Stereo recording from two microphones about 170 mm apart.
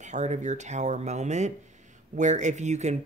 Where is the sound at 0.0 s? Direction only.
45° right (ahead or behind).